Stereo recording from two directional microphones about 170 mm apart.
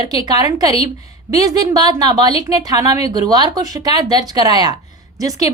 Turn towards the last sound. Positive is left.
turn(degrees=-20)  # may be behind; listen again after turning